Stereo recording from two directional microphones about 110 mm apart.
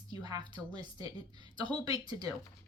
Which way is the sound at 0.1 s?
40° right (ahead or behind).